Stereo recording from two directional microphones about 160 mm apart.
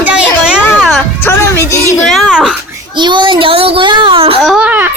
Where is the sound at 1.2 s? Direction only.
15° left (ahead or behind).